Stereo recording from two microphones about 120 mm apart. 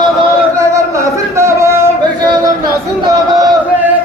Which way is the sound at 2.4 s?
35° right (ahead or behind).